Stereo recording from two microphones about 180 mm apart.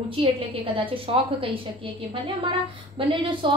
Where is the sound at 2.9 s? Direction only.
25° right (ahead or behind).